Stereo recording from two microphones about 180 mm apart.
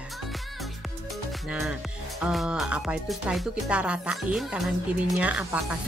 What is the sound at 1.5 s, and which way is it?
Speech, 5° right (ahead or behind).